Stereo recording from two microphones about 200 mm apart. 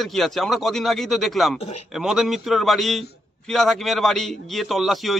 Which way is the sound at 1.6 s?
30° left (ahead or behind).